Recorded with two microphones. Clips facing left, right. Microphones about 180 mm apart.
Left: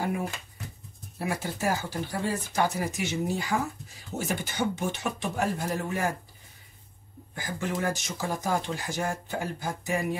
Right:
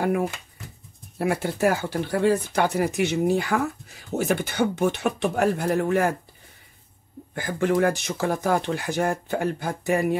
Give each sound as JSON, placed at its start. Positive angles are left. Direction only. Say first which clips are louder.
{"t": 1.1, "sound": "speech", "louder": "right 7 dB", "side_deg": -60}
{"t": 7.3, "sound": "speech", "louder": "right 9 dB", "side_deg": -60}